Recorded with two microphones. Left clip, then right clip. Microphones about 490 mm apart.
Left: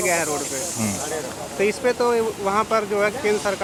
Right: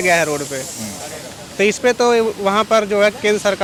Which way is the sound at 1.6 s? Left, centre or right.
Right.